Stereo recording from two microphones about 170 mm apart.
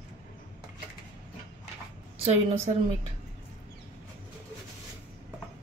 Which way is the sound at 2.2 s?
35° right (ahead or behind).